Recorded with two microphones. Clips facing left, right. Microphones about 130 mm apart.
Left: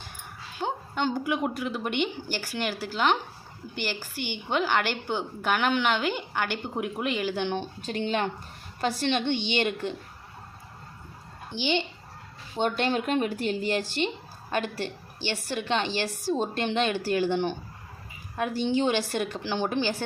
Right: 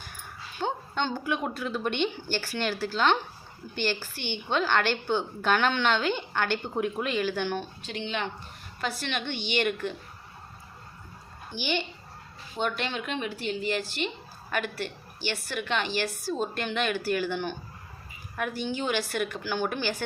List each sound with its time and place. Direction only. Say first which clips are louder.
0.6 s a woman's voice: left 1 dB; 10° left (ahead or behind)
7.8 s speech: left 5 dB; 40° left (ahead or behind)
8.8 s a woman's voice: left 6 dB; 30° left (ahead or behind)
11.5 s a woman's voice: left 3 dB; 20° left (ahead or behind)
12.5 s a woman's voice: left 5 dB; 35° left (ahead or behind)